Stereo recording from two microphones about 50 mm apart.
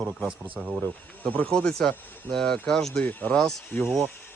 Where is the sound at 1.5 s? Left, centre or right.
Centre.